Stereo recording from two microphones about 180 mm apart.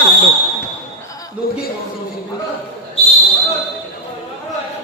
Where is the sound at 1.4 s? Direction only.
55° left (ahead or behind).